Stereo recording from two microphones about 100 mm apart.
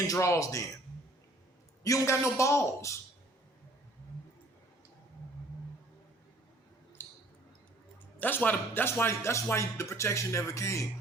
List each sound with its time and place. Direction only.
0.1 s a man's voice: 30° left (ahead or behind)
1.8 s a man's voice: 30° left (ahead or behind)
7.0 s a sound: 20° left (ahead or behind)
8.2 s speech: 15° left (ahead or behind)